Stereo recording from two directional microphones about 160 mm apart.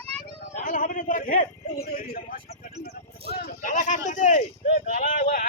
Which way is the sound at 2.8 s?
75° left (ahead or behind).